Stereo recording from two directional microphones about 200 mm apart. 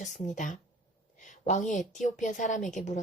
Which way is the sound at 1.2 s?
40° left (ahead or behind).